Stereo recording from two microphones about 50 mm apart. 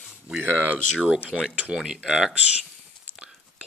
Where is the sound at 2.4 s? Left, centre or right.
Right.